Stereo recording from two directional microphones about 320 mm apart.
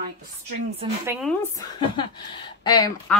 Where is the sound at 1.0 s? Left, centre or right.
Centre.